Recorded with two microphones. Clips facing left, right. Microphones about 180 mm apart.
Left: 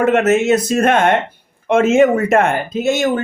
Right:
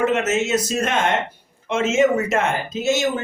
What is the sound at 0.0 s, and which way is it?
Speech, 55° left (ahead or behind).